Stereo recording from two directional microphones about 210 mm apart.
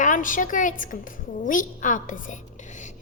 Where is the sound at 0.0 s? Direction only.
40° left (ahead or behind).